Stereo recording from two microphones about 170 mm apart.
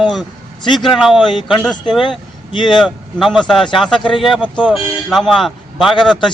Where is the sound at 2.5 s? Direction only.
30° left (ahead or behind).